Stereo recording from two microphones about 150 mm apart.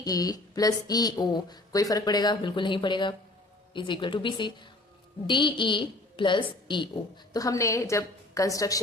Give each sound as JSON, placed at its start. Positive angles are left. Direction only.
{"t": 0.0, "sound": "a woman's voice", "side_deg": 25}